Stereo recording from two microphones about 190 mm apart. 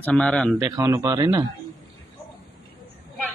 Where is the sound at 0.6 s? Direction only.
20° right (ahead or behind).